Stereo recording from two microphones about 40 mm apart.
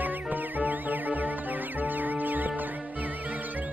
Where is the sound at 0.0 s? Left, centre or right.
Right.